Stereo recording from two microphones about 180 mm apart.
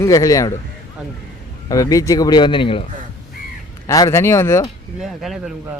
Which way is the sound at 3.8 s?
20° left (ahead or behind).